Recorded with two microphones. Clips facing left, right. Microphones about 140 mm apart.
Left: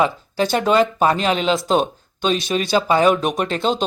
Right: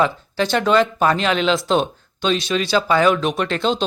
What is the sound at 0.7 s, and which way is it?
Speech, 5° left (ahead or behind).